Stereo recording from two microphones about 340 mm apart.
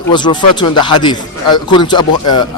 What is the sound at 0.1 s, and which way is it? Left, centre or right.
Speech, centre.